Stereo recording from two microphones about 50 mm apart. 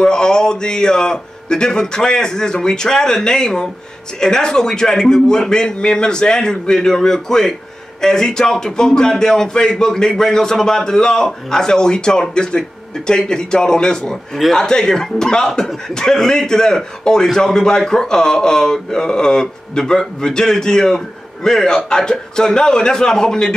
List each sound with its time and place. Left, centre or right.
0.0 s speech: centre